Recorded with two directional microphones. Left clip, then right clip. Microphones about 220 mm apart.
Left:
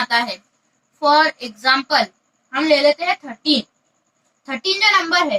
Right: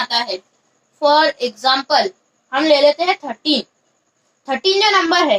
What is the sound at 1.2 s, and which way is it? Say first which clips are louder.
Speech: right 2 dB; 20° right (ahead or behind).